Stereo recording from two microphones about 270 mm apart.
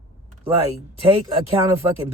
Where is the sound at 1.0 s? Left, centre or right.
Right.